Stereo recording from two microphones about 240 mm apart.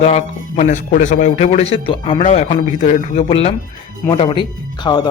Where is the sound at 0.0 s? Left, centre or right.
Left.